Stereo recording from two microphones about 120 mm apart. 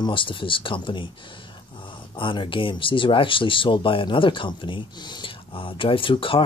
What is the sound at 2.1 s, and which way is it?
Speech, 45° left (ahead or behind).